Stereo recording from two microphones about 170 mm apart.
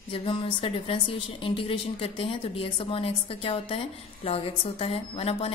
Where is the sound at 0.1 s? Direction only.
30° left (ahead or behind).